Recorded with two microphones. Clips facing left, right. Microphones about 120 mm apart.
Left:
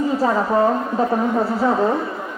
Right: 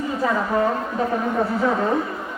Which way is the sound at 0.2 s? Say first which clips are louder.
Left 1 dB; 30° left (ahead or behind).